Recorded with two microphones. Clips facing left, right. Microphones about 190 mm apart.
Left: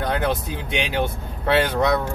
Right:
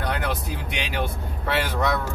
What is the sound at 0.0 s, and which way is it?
Speech, 25° left (ahead or behind).